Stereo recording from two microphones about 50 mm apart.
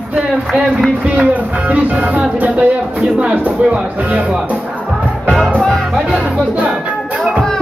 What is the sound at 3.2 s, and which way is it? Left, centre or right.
Speech, right.